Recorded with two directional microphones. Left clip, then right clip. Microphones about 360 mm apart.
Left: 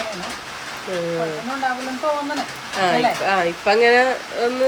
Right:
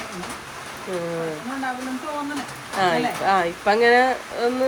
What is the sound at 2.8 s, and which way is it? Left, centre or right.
Speech, centre.